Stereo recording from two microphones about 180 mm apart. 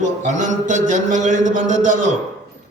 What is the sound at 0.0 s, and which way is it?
A man's voice, 45° right (ahead or behind).